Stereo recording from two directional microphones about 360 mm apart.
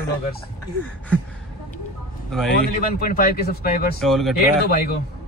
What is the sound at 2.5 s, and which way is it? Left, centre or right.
Speech, left.